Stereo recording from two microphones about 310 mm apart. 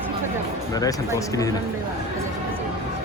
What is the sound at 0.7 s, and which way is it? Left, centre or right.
Speech, centre.